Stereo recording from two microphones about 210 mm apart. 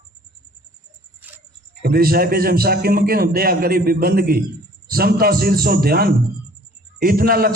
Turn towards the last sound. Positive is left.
turn(degrees=-45)  # may be behind; listen again after turning